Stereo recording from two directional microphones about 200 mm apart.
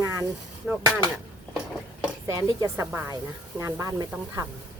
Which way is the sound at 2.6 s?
15° right (ahead or behind).